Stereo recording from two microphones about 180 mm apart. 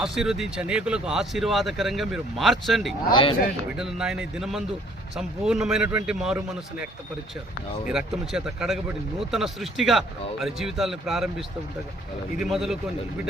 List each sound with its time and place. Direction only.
0.0 s speech: 5° right (ahead or behind)
3.1 s a man's voice: 30° left (ahead or behind)
3.8 s speech: 5° right (ahead or behind)
7.9 s speech: 5° right (ahead or behind)